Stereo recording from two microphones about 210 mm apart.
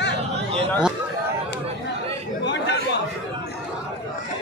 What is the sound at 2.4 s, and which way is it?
Chatter, 55° left (ahead or behind).